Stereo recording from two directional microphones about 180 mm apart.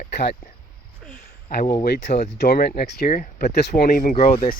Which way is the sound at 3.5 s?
65° left (ahead or behind).